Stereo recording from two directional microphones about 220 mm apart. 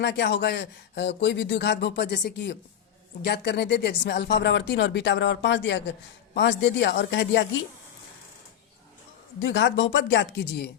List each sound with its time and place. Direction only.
0.0 s speech: 50° left (ahead or behind)
9.4 s speech: 55° left (ahead or behind)